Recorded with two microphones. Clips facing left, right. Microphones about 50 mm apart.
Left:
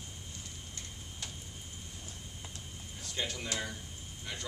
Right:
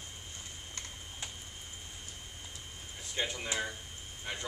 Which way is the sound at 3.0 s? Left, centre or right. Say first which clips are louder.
Right 2 dB; centre.